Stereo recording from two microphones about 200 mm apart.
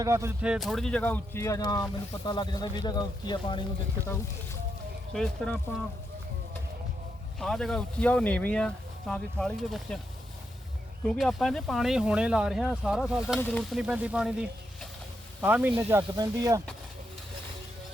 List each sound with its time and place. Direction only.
0.0 s speech: 15° right (ahead or behind); by 3.6 s 20° left (ahead or behind)
5.1 s speech: centre (ahead or behind)
7.3 s speech: centre (ahead or behind)
11.0 s speech: 5° left (ahead or behind); by 16.6 s 15° right (ahead or behind)